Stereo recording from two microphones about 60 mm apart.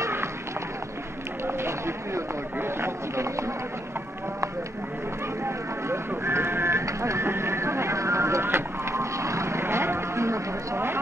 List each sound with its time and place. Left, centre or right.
0.0 s run: right
1.5 s speech: right
5.4 s a sound: right